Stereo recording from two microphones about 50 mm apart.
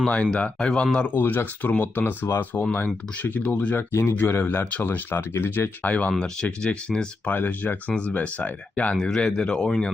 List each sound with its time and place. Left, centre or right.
0.0 s speech: left
1.1 s speech: left
6.1 s speech: centre
7.3 s speech: left
9.0 s speech: centre